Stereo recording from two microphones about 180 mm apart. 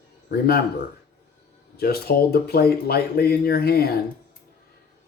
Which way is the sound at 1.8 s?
60° left (ahead or behind).